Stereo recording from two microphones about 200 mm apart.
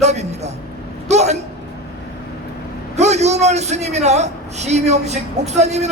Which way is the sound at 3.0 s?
35° right (ahead or behind).